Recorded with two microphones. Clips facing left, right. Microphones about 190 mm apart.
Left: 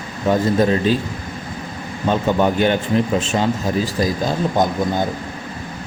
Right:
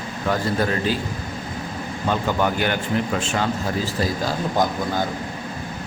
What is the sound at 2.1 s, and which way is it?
Speech, 20° left (ahead or behind).